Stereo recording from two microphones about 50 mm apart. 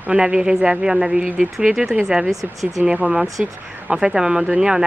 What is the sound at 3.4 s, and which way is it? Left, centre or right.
A woman's voice, right.